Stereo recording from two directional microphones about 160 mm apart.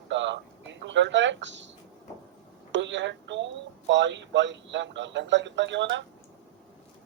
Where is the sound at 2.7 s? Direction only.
90° right.